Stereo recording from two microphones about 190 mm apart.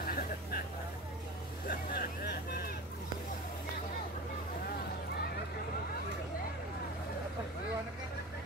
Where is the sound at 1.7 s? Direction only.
55° left (ahead or behind).